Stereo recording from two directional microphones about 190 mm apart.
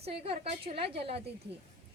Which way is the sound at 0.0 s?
30° right (ahead or behind).